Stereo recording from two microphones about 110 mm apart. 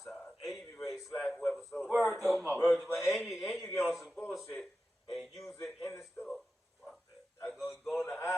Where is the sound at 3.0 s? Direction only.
Centre (ahead or behind).